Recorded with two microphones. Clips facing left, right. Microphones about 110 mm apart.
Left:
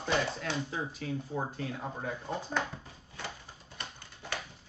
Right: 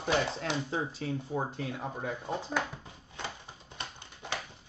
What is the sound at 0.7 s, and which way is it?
Speech, 30° right (ahead or behind).